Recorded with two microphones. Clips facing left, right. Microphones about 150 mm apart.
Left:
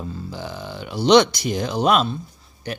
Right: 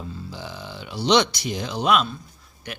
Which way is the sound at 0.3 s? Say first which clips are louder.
Left 4 dB; 50° left (ahead or behind).